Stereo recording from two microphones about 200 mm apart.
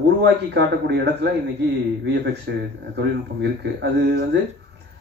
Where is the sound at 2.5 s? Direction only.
55° right (ahead or behind).